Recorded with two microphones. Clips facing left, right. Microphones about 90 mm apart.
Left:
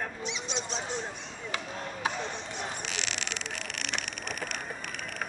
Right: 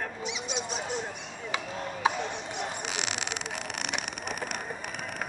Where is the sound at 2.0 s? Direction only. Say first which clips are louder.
Right 5 dB; 15° right (ahead or behind).